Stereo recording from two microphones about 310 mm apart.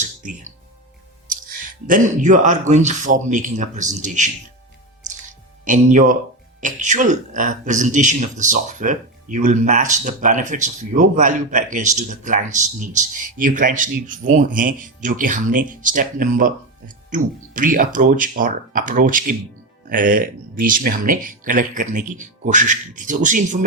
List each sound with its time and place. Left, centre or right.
0.0 s music: right
1.9 s a man's voice: right
5.6 s a man's voice: right